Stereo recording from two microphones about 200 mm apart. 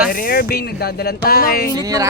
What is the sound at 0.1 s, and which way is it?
Speech, 45° left (ahead or behind).